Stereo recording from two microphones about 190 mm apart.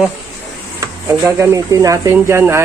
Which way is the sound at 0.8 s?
15° right (ahead or behind).